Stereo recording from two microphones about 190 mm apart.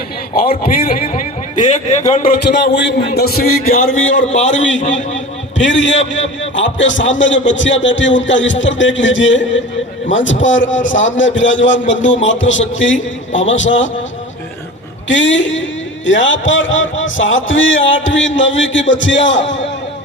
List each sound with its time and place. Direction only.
0.4 s a man's voice: 45° left (ahead or behind)
2.5 s a man's voice: 70° left (ahead or behind); by 3.9 s 50° left (ahead or behind)
4.2 s a man's voice: 85° left
5.5 s a man's voice: 70° left (ahead or behind)
15.0 s a man's voice: 75° left (ahead or behind)